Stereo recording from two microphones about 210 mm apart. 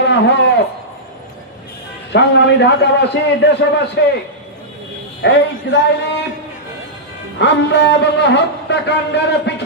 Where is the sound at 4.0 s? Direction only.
55° left (ahead or behind).